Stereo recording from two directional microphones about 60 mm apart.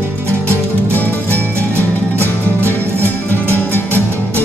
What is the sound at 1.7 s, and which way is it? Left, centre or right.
Music, right.